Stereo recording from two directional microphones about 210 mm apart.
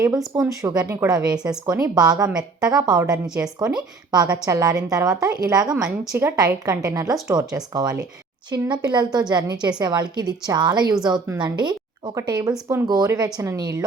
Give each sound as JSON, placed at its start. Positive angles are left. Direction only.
{"t": 0.3, "sound": "speech", "side_deg": -15}
{"t": 3.2, "sound": "speech", "side_deg": 0}
{"t": 3.8, "sound": "a woman's voice", "side_deg": -20}